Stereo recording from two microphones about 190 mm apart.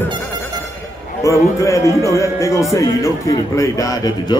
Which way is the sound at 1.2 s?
15° left (ahead or behind).